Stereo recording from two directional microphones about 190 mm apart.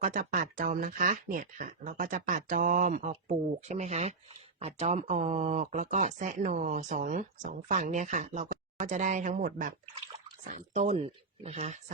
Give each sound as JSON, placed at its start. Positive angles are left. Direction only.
{"t": 0.0, "sound": "speech", "side_deg": -45}